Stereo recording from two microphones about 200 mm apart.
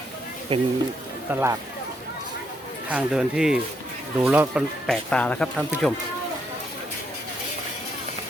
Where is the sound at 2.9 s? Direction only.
5° right (ahead or behind).